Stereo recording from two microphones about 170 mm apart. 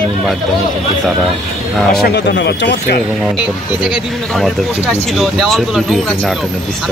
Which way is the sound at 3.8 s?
Centre (ahead or behind).